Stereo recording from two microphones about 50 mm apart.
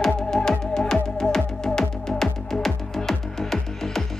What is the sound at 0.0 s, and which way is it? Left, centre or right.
Music, centre.